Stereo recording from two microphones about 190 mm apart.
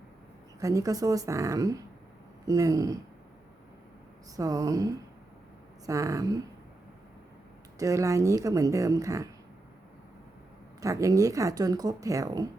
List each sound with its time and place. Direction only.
0.6 s speech: 15° right (ahead or behind)
4.4 s speech: 20° right (ahead or behind)
7.8 s speech: 15° right (ahead or behind)
10.8 s speech: 15° right (ahead or behind)